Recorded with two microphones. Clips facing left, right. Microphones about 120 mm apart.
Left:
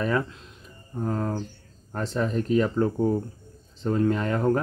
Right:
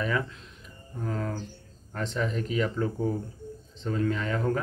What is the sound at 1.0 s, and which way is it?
Speech, 40° left (ahead or behind).